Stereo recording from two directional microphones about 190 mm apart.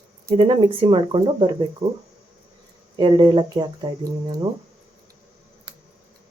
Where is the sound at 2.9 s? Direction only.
25° right (ahead or behind).